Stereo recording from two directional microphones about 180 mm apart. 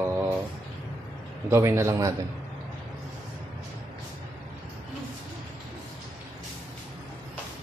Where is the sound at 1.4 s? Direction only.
15° right (ahead or behind).